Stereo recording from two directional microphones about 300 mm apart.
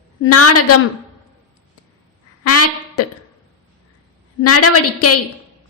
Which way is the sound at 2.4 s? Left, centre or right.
Left.